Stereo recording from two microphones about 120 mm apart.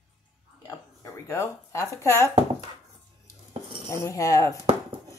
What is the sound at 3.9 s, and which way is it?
Speech, 25° left (ahead or behind).